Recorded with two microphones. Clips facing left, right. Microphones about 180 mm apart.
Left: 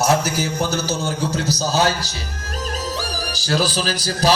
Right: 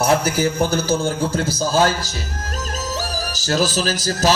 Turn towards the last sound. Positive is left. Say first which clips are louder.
# right 1 dB
turn(degrees=-45)  # may be behind; listen again after turning